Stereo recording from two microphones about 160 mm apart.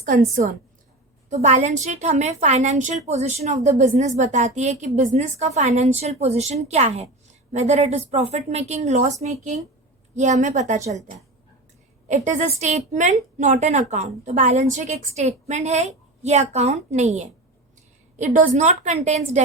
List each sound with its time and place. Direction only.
0.4 s a woman's voice: 55° right (ahead or behind)